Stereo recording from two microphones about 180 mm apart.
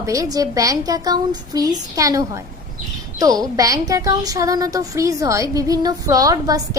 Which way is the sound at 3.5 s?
20° right (ahead or behind).